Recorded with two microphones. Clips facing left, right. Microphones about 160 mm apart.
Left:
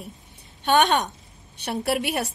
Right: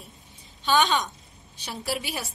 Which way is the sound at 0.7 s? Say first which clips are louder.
Left 3 dB; 65° left (ahead or behind).